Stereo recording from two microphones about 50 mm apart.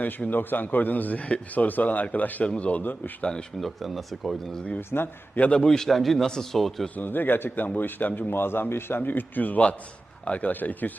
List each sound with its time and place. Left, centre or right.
0.0 s a man's voice: left
3.6 s a man's voice: centre
4.8 s speech: left
5.4 s a man's voice: centre
6.9 s a man's voice: left